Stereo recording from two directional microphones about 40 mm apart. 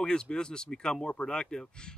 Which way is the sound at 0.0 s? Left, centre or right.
Left.